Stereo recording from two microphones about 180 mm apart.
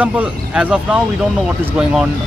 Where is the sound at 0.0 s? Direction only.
10° right (ahead or behind).